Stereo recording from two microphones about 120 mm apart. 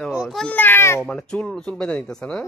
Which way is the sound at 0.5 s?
20° left (ahead or behind).